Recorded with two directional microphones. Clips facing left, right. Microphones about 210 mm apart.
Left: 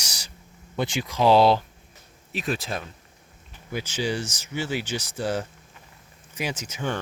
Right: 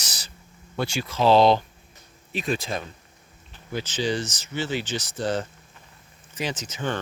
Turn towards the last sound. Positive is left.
turn(degrees=10)  # may be behind; listen again after turning